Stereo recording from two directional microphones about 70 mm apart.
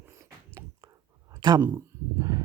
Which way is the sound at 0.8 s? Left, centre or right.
Right.